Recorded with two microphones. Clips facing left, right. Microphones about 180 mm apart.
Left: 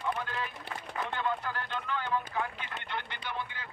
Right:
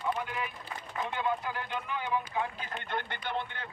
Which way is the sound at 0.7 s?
70° left (ahead or behind).